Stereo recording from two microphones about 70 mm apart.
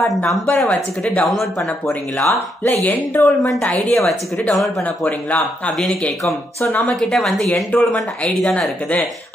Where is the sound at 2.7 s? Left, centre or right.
Left.